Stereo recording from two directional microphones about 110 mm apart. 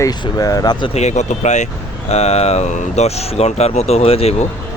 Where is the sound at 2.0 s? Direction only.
75° left (ahead or behind).